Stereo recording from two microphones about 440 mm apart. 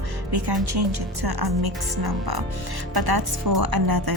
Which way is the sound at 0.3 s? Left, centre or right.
Right.